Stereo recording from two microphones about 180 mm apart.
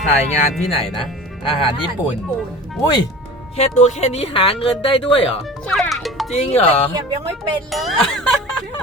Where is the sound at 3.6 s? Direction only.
40° left (ahead or behind).